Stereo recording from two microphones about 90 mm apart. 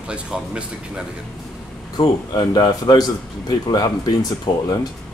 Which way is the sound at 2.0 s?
50° left (ahead or behind).